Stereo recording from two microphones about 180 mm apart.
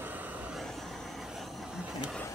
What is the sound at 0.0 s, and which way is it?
Vehicle, 10° right (ahead or behind).